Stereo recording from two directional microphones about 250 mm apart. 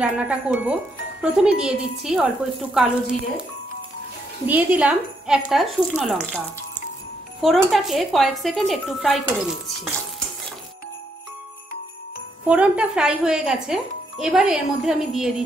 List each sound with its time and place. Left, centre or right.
0.0 s speech: centre
4.5 s speech: centre
7.4 s speech: centre
12.4 s speech: centre